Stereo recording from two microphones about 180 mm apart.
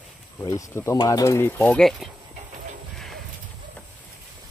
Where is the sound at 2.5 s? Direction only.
40° right (ahead or behind).